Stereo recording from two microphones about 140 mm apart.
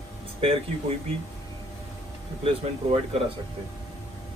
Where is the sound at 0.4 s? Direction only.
45° right (ahead or behind).